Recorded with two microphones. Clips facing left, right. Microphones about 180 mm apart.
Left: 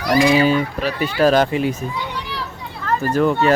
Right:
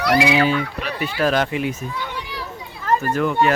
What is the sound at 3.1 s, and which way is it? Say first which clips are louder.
Speech: left 6 dB; 35° left (ahead or behind).